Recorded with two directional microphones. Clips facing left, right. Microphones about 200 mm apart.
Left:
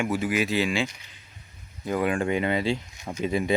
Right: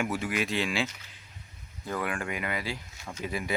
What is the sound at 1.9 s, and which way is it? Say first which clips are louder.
Speech: left 8 dB; 25° left (ahead or behind).